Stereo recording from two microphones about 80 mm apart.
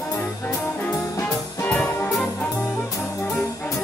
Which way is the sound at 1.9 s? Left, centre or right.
Left.